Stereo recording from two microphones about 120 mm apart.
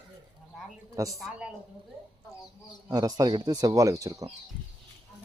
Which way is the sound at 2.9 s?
30° right (ahead or behind).